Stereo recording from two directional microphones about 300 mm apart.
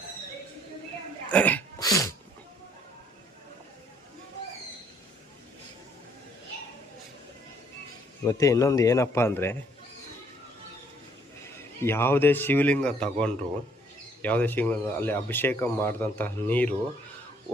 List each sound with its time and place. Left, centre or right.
1.3 s a sound: centre
8.2 s a man's voice: centre
11.8 s a man's voice: centre